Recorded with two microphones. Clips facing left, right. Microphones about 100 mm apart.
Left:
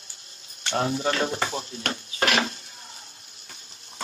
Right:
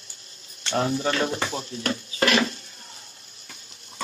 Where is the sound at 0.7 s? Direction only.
50° left (ahead or behind).